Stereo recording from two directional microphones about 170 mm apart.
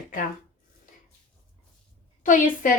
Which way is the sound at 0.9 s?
55° left (ahead or behind).